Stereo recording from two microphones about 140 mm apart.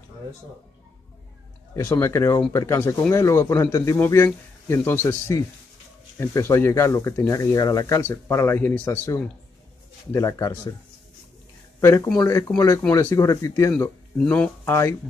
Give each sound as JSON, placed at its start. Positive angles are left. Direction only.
{"t": 1.7, "sound": "speech", "side_deg": 15}
{"t": 11.8, "sound": "speech", "side_deg": 20}
{"t": 14.1, "sound": "speech", "side_deg": 5}
{"t": 14.6, "sound": "speech", "side_deg": 20}